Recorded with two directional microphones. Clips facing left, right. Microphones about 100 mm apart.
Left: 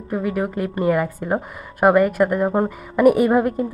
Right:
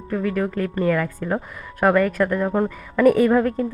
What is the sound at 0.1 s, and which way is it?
Speech, 15° left (ahead or behind).